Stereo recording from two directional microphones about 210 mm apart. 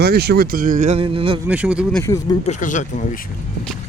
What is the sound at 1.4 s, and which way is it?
Speech, 5° right (ahead or behind).